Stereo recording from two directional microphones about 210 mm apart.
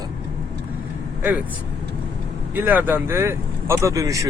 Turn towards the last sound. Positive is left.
turn(degrees=-15)  # may be behind; listen again after turning